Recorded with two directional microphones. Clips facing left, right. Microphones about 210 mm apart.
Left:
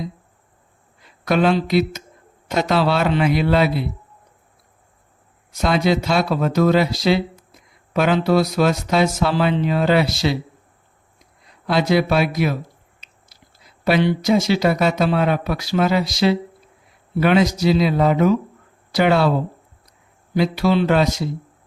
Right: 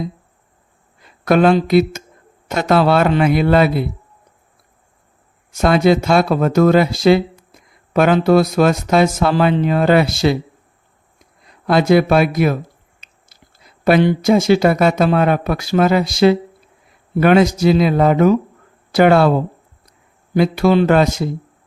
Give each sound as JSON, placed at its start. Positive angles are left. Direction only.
{"t": 1.2, "sound": "speech", "side_deg": -50}
{"t": 5.5, "sound": "speech", "side_deg": -50}
{"t": 11.6, "sound": "speech", "side_deg": -50}
{"t": 13.8, "sound": "speech", "side_deg": -50}
{"t": 20.3, "sound": "speech", "side_deg": -50}